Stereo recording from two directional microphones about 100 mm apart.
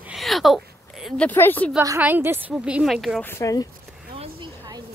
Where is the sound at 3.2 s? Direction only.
25° left (ahead or behind).